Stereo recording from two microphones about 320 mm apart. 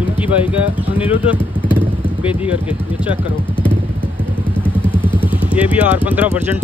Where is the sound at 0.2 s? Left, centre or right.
Centre.